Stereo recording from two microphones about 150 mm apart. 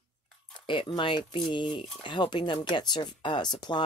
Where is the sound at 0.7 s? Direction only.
35° left (ahead or behind).